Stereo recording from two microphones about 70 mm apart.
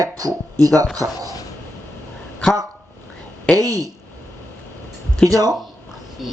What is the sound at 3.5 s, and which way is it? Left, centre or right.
Speech, right.